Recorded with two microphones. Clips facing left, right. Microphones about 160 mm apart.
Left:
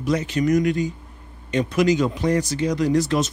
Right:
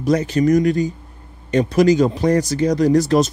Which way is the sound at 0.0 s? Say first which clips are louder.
Right 5 dB; 40° right (ahead or behind).